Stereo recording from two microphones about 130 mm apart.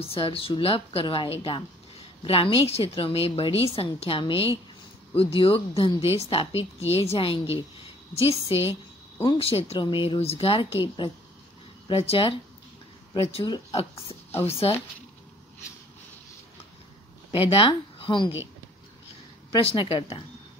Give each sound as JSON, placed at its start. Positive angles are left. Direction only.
{"t": 0.0, "sound": "a woman's voice", "side_deg": 45}
{"t": 11.9, "sound": "a woman's voice", "side_deg": 45}
{"t": 17.3, "sound": "speech", "side_deg": 45}
{"t": 19.5, "sound": "a woman's voice", "side_deg": 40}